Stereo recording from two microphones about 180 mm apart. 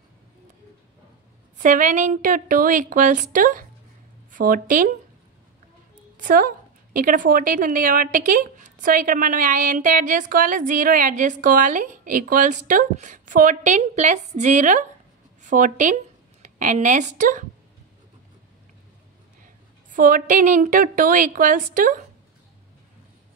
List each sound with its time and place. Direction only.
1.6 s a woman's voice: 45° right (ahead or behind)
6.1 s a woman's voice: 50° right (ahead or behind)
19.9 s a woman's voice: 50° right (ahead or behind)